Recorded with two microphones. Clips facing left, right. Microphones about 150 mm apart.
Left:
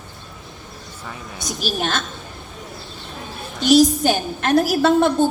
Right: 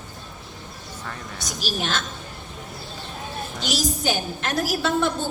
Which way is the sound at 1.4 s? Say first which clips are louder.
Left 5 dB; 50° left (ahead or behind).